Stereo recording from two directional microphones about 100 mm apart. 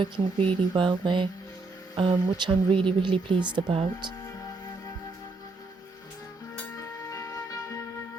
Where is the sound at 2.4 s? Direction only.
60° right (ahead or behind).